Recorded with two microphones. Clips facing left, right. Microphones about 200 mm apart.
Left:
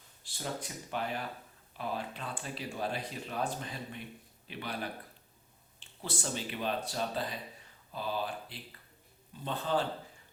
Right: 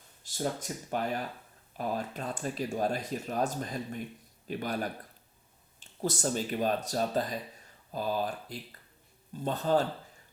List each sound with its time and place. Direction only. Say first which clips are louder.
0.2 s speech: right 6 dB; 45° right (ahead or behind)